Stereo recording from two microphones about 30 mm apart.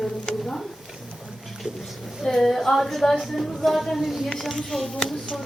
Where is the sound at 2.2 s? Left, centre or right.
Centre.